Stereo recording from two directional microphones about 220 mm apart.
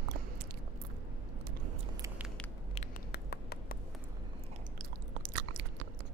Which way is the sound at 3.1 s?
45° left (ahead or behind).